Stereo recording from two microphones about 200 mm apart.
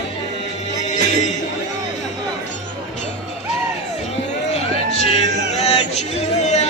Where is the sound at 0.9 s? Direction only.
35° left (ahead or behind).